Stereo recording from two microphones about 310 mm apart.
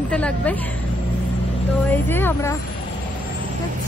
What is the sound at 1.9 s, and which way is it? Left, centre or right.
Speech, centre.